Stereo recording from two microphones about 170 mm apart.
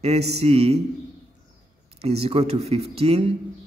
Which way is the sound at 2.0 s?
35° right (ahead or behind).